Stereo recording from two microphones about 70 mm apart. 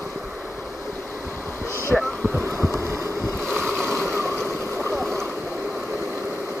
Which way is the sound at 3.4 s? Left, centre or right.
Centre.